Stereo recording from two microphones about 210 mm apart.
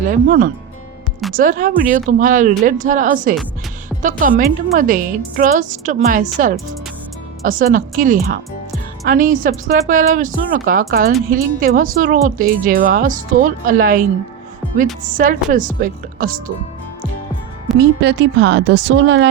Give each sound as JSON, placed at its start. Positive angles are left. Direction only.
{"t": 0.0, "sound": "a woman's voice", "side_deg": -40}
{"t": 17.7, "sound": "speech", "side_deg": -55}